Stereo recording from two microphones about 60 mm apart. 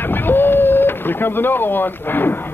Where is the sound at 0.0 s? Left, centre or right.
Left.